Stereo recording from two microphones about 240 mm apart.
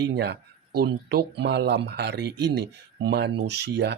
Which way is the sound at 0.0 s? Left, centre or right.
Right.